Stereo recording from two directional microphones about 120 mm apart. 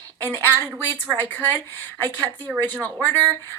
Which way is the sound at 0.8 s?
15° left (ahead or behind).